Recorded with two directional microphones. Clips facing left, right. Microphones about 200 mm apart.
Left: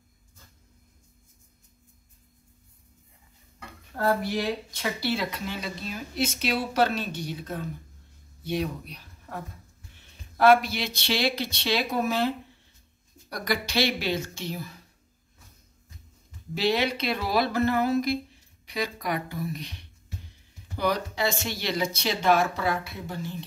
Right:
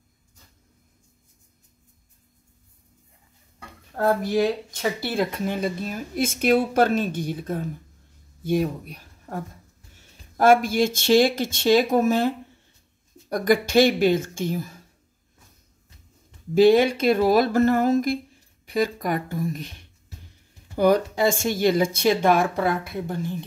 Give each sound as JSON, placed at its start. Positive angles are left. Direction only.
{"t": 3.5, "sound": "speech", "side_deg": -45}
{"t": 16.5, "sound": "speech", "side_deg": -50}